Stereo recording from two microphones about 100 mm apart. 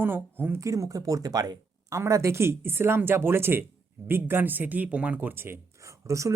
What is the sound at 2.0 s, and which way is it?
Speech, 30° right (ahead or behind).